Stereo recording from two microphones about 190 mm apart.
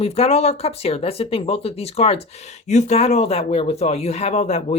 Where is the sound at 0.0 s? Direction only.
30° left (ahead or behind).